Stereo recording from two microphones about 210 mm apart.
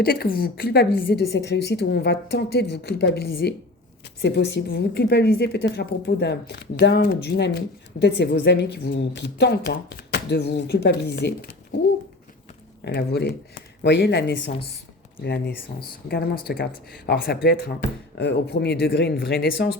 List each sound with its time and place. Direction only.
0.0 s speech: 45° left (ahead or behind)
12.8 s speech: 50° left (ahead or behind)